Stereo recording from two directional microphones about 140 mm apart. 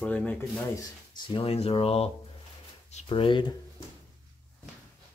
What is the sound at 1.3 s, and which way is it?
Speech, 45° left (ahead or behind).